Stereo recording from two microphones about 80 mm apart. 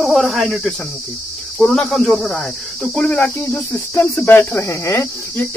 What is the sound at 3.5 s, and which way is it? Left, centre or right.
Cricket, left.